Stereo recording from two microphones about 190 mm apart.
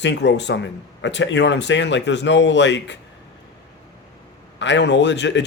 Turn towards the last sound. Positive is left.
turn(degrees=70)  # may be behind; listen again after turning